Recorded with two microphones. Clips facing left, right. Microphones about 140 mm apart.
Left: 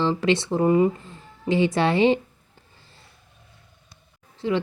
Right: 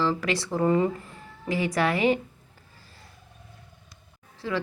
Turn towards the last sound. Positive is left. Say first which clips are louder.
# left 6 dB
turn(degrees=20)  # may be behind; listen again after turning